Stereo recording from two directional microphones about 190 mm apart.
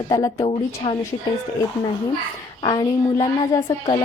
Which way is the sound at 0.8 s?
25° left (ahead or behind).